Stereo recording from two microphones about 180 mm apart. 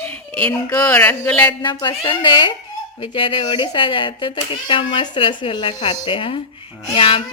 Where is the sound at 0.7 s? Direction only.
15° left (ahead or behind).